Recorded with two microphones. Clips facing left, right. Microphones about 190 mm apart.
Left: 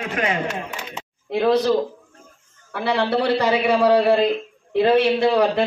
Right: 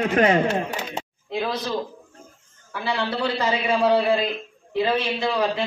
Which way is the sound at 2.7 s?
65° left (ahead or behind).